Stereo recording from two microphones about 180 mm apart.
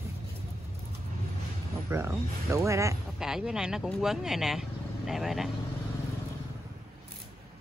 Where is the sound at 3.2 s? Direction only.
5° right (ahead or behind).